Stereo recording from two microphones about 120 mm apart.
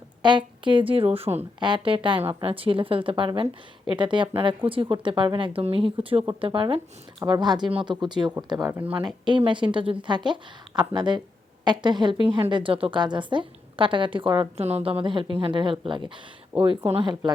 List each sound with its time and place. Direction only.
0.2 s a woman's voice: 40° right (ahead or behind); by 1.5 s 60° right (ahead or behind)
1.5 s a woman's voice: 40° right (ahead or behind)
8.7 s speech: 15° right (ahead or behind)
9.2 s a woman's voice: 45° right (ahead or behind)
14.6 s a woman's voice: 60° right (ahead or behind)